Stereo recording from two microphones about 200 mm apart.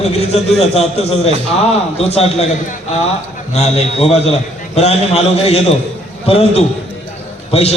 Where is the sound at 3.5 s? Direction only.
35° left (ahead or behind).